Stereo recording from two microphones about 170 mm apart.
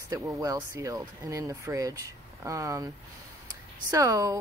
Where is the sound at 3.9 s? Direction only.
20° right (ahead or behind).